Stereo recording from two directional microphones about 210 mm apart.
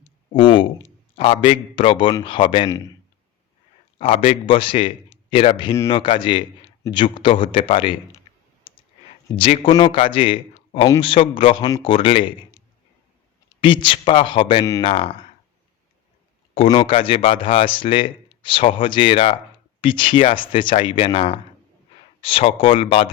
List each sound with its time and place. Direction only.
0.3 s speech: 25° left (ahead or behind)
3.9 s speech: 25° left (ahead or behind)
8.7 s clicking: 25° left (ahead or behind)
9.3 s speech: 25° left (ahead or behind)
13.6 s speech: 25° left (ahead or behind)
16.6 s speech: 25° left (ahead or behind)